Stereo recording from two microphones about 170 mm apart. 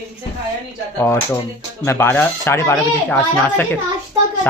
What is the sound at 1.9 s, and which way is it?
Speech, 15° left (ahead or behind).